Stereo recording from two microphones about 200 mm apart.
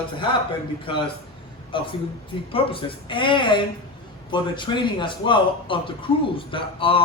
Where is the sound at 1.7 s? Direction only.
25° left (ahead or behind).